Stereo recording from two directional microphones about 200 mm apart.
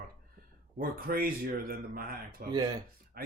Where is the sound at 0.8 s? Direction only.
45° right (ahead or behind).